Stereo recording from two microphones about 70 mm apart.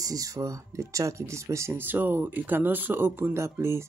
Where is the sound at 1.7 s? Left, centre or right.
Right.